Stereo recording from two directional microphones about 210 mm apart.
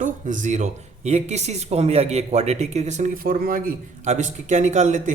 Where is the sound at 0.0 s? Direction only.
35° right (ahead or behind).